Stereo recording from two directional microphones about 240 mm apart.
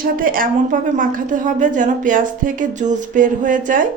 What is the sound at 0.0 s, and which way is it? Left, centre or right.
A woman's voice, right.